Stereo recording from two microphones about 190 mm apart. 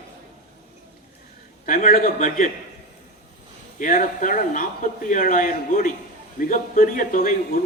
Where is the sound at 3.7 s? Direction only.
45° left (ahead or behind).